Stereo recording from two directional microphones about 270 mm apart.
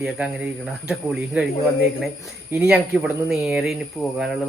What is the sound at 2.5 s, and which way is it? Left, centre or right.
Speech, centre.